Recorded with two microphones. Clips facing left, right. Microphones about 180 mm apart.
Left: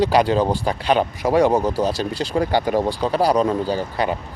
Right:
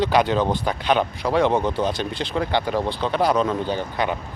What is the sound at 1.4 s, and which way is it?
Speech, 10° left (ahead or behind).